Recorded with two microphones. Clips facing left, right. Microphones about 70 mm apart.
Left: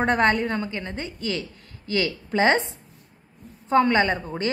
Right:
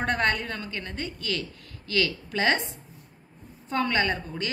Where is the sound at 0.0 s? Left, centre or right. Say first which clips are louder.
Left 5 dB; left.